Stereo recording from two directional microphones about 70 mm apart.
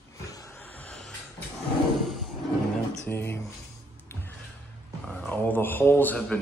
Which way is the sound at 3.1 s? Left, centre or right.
Left.